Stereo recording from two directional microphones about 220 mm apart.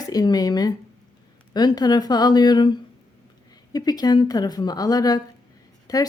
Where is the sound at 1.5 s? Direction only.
20° left (ahead or behind).